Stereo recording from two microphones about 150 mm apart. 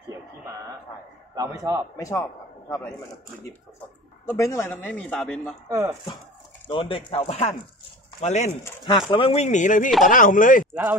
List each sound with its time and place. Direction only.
1.3 s a man's voice: 25° right (ahead or behind)
2.0 s a man's voice: 20° left (ahead or behind)
4.3 s a man's voice: 20° left (ahead or behind); by 5.5 s 5° left (ahead or behind)
5.7 s a man's voice: 20° right (ahead or behind)
6.7 s speech: 35° left (ahead or behind)
8.8 s speech: 30° left (ahead or behind)
9.3 s speech: 50° left (ahead or behind)